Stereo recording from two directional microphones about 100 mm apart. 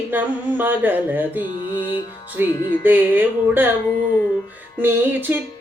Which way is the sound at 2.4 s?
25° right (ahead or behind).